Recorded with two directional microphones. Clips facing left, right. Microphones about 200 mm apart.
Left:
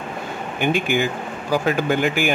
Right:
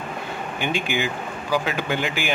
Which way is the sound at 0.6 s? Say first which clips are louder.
Left 6 dB; 50° left (ahead or behind).